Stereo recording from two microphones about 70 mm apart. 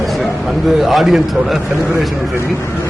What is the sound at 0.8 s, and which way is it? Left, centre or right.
Speech, centre.